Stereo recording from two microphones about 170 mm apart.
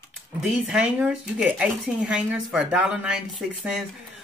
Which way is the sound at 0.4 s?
5° right (ahead or behind).